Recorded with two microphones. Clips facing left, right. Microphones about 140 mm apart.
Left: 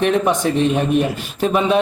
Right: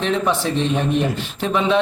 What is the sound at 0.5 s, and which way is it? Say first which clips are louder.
A man's voice: left 3 dB; 10° left (ahead or behind).